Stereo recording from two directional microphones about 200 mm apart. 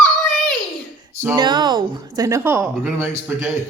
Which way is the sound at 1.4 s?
20° right (ahead or behind).